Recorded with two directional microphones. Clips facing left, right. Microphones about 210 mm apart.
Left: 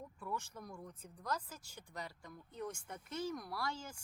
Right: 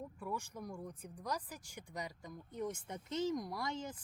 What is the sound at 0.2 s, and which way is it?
Speech, 10° right (ahead or behind).